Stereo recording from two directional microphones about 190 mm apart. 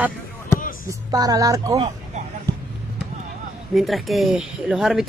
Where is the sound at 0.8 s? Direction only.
20° right (ahead or behind).